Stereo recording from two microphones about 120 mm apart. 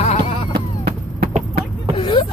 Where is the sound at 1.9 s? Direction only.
45° left (ahead or behind).